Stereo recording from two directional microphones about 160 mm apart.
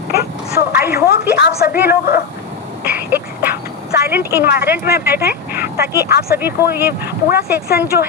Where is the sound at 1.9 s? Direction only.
90° left.